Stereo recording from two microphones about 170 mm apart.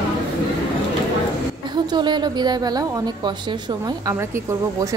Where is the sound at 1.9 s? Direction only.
25° right (ahead or behind).